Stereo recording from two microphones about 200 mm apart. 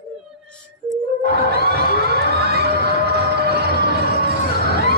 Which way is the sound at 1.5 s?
50° right (ahead or behind).